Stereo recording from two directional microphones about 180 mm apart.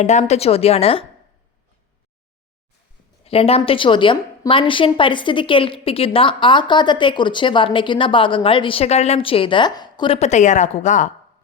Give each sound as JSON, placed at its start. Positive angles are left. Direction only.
{"t": 0.0, "sound": "a woman's voice", "side_deg": 40}
{"t": 3.2, "sound": "a woman's voice", "side_deg": 35}